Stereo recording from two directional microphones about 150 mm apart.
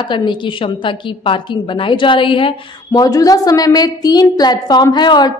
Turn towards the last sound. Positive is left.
turn(degrees=30)  # may be behind; listen again after turning